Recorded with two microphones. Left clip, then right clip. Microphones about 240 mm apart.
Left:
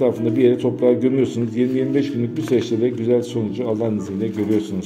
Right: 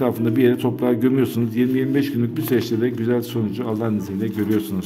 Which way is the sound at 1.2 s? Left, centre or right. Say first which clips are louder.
Left 1 dB; right.